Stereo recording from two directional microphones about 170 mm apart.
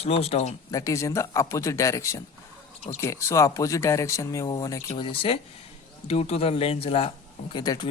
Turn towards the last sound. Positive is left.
turn(degrees=25)  # may be behind; listen again after turning